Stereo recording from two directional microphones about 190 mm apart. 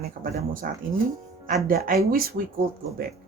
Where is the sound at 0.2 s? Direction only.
50° right (ahead or behind).